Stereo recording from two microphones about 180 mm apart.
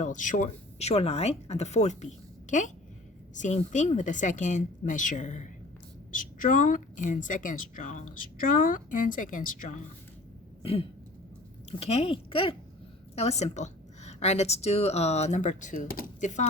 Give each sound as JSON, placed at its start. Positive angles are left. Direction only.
{"t": 0.0, "sound": "a woman's voice", "side_deg": 45}
{"t": 10.6, "sound": "throat clearing", "side_deg": 30}
{"t": 11.8, "sound": "a woman's voice", "side_deg": 35}